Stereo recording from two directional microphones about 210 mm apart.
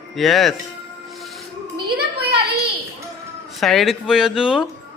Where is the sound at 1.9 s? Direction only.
50° right (ahead or behind).